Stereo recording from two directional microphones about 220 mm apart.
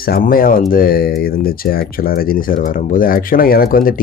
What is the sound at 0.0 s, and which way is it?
Speech, 40° left (ahead or behind).